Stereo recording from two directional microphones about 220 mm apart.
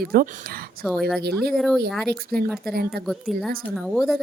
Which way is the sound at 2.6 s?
45° right (ahead or behind).